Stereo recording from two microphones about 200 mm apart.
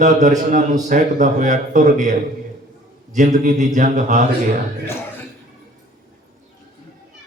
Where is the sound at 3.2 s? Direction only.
40° right (ahead or behind).